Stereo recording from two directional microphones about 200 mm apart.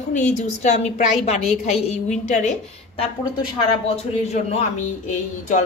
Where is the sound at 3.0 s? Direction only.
25° left (ahead or behind).